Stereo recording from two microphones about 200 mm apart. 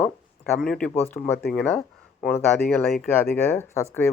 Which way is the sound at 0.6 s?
5° left (ahead or behind).